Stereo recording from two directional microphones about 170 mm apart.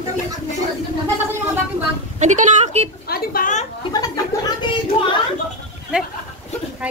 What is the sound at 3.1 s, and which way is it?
Speech, 55° left (ahead or behind).